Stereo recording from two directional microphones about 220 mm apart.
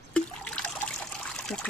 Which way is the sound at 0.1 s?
5° left (ahead or behind).